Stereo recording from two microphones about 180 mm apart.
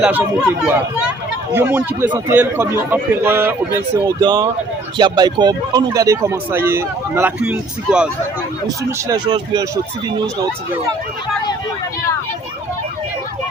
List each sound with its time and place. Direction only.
0.0 s speech: 10° right (ahead or behind)
8.6 s speech: 25° right (ahead or behind)